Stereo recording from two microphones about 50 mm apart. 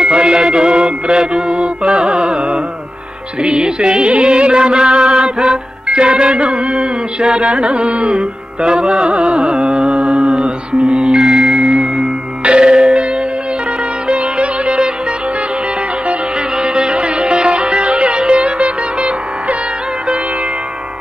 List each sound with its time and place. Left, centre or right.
0.0 s mantra: centre
3.4 s music: right
14.0 s music: right
16.1 s music: centre